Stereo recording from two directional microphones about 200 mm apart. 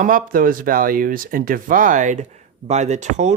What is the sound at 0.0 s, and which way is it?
Speech, 40° right (ahead or behind).